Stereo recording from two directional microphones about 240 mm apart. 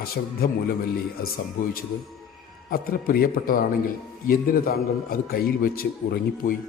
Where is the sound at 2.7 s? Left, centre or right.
Left.